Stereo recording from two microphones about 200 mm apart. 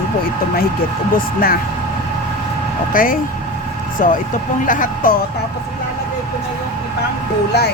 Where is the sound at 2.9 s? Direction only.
45° left (ahead or behind).